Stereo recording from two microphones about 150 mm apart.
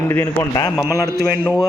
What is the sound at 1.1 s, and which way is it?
Speech, 15° right (ahead or behind).